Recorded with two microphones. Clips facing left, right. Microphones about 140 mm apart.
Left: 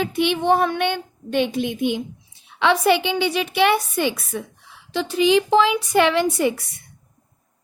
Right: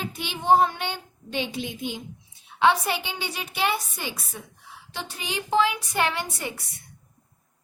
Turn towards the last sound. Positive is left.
turn(degrees=90)